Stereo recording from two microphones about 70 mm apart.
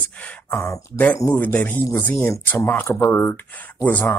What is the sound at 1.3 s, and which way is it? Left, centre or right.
Speech, left.